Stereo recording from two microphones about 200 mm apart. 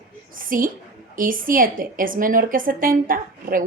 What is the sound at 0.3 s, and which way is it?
A woman's voice, 45° right (ahead or behind).